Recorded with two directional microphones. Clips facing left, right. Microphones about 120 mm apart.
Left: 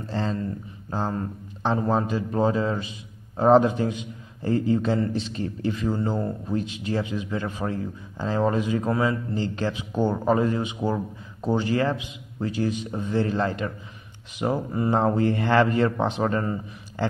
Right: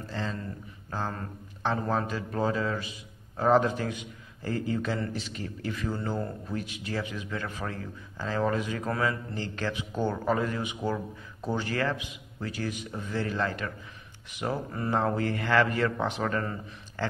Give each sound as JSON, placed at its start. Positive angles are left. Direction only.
{"t": 0.0, "sound": "speech", "side_deg": 30}
{"t": 0.8, "sound": "a man's voice", "side_deg": 20}